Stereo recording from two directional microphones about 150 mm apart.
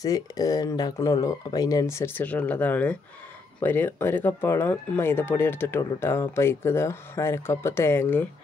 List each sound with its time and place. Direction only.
0.0 s speech: 25° left (ahead or behind)